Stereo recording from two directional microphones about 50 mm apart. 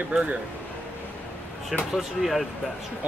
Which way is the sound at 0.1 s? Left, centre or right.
Centre.